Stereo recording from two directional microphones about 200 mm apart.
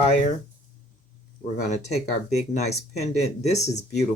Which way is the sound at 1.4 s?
35° left (ahead or behind).